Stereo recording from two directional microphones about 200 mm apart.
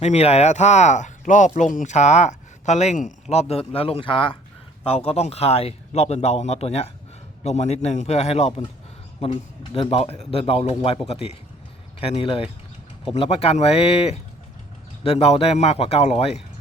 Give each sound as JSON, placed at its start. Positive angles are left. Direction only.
{"t": 0.0, "sound": "a man's voice", "side_deg": 35}